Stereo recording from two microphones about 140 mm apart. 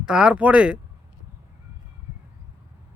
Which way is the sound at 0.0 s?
5° right (ahead or behind).